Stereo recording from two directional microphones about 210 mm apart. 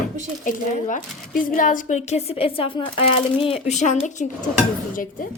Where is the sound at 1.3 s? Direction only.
40° left (ahead or behind).